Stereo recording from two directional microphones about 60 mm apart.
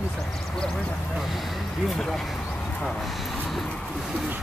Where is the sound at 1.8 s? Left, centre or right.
Centre.